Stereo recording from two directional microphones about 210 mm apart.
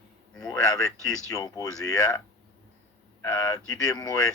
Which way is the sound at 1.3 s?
15° left (ahead or behind).